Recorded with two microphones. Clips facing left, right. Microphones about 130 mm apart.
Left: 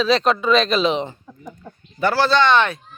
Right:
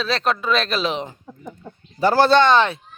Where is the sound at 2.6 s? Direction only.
25° right (ahead or behind).